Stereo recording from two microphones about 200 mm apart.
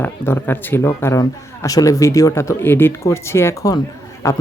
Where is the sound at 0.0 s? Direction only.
10° left (ahead or behind).